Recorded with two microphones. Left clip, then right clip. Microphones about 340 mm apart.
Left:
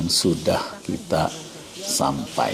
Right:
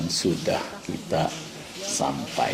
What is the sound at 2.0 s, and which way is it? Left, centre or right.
Speech, left.